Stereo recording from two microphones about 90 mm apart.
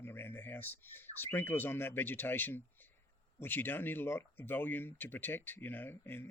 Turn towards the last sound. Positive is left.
turn(degrees=25)  # may be behind; listen again after turning